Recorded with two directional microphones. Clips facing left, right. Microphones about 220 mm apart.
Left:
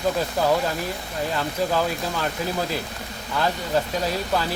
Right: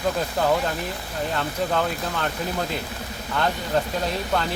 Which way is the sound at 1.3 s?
Centre (ahead or behind).